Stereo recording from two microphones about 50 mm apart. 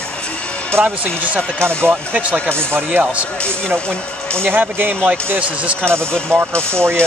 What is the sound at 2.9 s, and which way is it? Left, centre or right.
Speech, right.